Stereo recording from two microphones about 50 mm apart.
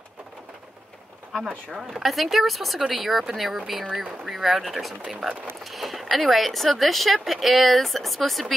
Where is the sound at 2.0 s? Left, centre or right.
Centre.